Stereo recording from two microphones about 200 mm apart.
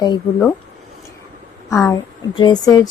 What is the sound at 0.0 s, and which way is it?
Speech, 20° left (ahead or behind).